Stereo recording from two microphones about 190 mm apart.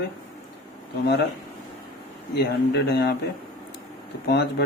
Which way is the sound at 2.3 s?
60° left (ahead or behind).